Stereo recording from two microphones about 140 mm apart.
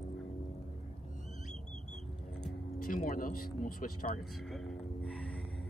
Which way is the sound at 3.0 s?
85° left.